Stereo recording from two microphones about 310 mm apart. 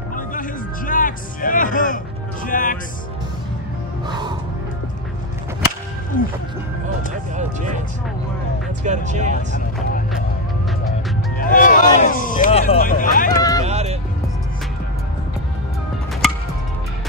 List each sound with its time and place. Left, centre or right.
0.1 s music: left
2.4 s speech: left
7.3 s speech: right
8.8 s speech: right
11.3 s a sound: left
13.4 s vehicle: centre
13.7 s music: right
16.2 s music: centre